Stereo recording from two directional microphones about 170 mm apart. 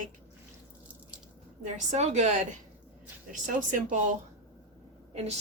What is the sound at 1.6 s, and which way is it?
Speech, 45° right (ahead or behind).